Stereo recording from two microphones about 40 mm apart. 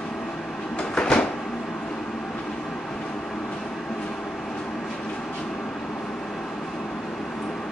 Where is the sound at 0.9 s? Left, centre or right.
Left.